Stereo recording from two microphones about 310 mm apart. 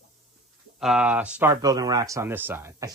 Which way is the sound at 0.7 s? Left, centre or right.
Centre.